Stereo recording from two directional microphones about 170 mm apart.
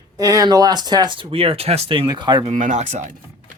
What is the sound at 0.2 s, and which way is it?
Speech, 20° right (ahead or behind).